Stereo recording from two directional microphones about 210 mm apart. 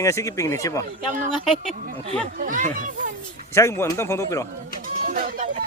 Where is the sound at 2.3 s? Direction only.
40° right (ahead or behind).